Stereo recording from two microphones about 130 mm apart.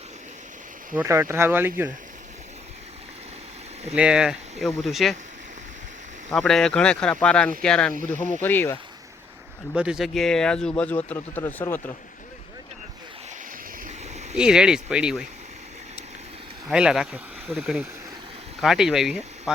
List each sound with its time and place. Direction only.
0.9 s speech: 20° right (ahead or behind)
3.9 s speech: 5° right (ahead or behind)
6.3 s speech: 5° left (ahead or behind)
9.7 s speech: 5° right (ahead or behind); by 11.9 s 20° left (ahead or behind)
14.3 s speech: 5° right (ahead or behind)
16.6 s speech: 5° right (ahead or behind)